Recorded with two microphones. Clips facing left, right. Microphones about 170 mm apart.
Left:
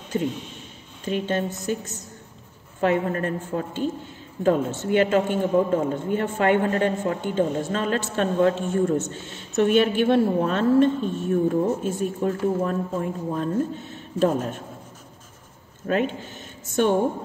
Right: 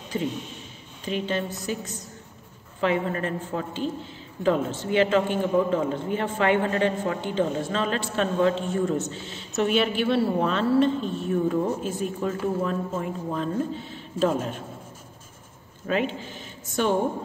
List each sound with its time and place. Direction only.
1.0 s speech: 50° left (ahead or behind)
2.8 s speech: 50° left (ahead or behind)
15.9 s speech: 50° left (ahead or behind)